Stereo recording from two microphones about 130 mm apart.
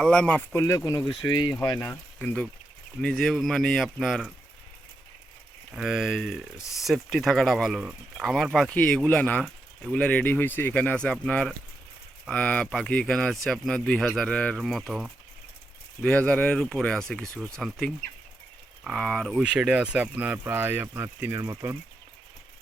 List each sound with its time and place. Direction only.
0.0 s speech: 5° left (ahead or behind)
0.5 s speech: 25° left (ahead or behind)
1.9 s speech: 10° left (ahead or behind)
5.7 s speech: 5° right (ahead or behind)
14.6 s speech: 5° right (ahead or behind)
16.0 s speech: 10° left (ahead or behind)
19.4 s speech: 5° right (ahead or behind); by 21.8 s 25° right (ahead or behind)